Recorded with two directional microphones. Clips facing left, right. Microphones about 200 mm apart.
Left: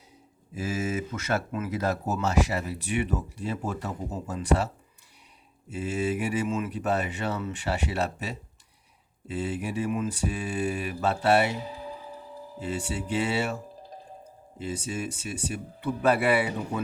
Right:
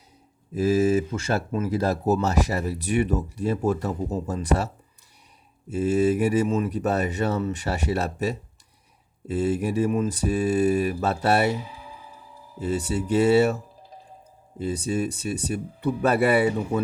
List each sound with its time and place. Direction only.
0.5 s speech: 35° right (ahead or behind)
5.7 s speech: 40° right (ahead or behind)
12.5 s speech: 40° right (ahead or behind)
14.6 s speech: 40° right (ahead or behind)